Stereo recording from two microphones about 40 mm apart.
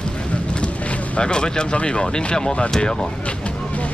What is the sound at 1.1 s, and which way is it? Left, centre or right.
Speech, left.